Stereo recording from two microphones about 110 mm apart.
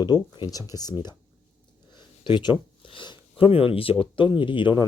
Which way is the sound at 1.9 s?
45° left (ahead or behind).